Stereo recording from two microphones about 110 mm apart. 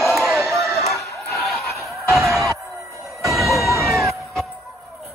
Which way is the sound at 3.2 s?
Centre (ahead or behind).